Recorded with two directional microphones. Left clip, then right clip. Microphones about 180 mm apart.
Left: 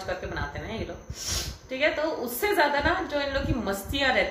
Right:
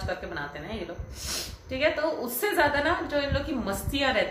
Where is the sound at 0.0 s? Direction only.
Centre (ahead or behind).